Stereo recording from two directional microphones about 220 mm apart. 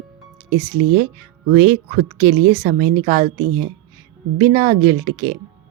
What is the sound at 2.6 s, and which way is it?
Speech, 30° right (ahead or behind).